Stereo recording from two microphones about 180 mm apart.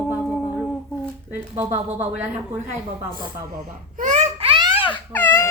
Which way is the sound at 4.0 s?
45° right (ahead or behind).